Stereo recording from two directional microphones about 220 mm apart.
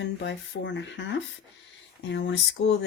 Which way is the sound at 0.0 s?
55° left (ahead or behind).